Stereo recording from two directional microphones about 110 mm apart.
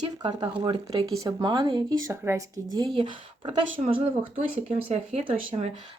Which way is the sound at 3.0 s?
50° right (ahead or behind).